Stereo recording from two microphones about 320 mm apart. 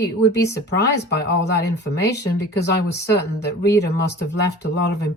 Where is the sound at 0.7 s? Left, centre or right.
Left.